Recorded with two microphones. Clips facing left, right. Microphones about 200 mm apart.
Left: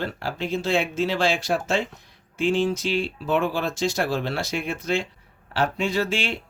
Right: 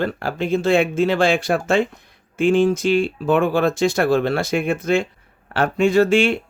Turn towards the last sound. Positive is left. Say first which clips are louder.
# right 10 dB
turn(degrees=-50)  # may be behind; listen again after turning